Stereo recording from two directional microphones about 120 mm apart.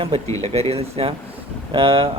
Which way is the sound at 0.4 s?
55° right (ahead or behind).